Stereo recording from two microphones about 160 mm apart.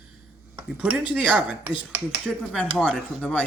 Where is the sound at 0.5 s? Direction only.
10° right (ahead or behind).